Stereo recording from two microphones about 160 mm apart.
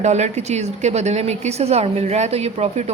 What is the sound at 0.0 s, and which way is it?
A woman's voice, 45° right (ahead or behind).